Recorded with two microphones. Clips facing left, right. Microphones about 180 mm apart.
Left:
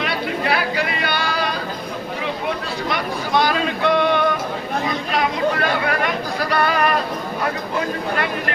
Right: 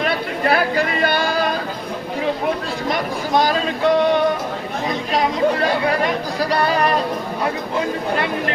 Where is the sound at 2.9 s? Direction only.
40° right (ahead or behind).